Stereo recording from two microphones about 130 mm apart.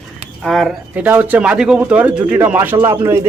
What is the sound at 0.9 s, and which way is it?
Speech, 10° right (ahead or behind).